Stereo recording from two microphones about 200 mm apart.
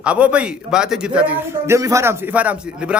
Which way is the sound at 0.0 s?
5° right (ahead or behind).